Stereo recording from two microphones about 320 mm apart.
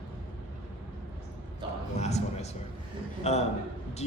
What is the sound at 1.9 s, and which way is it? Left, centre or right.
Speech, left.